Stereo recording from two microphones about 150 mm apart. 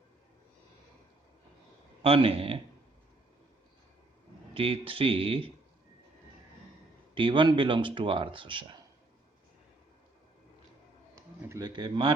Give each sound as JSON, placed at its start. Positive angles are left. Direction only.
{"t": 2.0, "sound": "speech", "side_deg": -40}
{"t": 4.5, "sound": "a man's voice", "side_deg": -35}
{"t": 7.1, "sound": "a man's voice", "side_deg": -35}
{"t": 11.1, "sound": "a sound", "side_deg": -20}
{"t": 11.7, "sound": "a man's voice", "side_deg": -30}